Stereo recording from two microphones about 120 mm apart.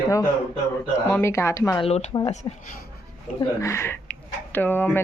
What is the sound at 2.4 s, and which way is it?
Speech, 35° left (ahead or behind).